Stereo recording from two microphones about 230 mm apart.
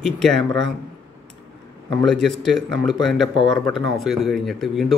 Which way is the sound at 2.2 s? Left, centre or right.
Centre.